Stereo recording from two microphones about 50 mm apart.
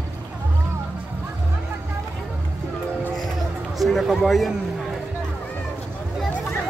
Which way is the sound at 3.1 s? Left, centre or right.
Centre.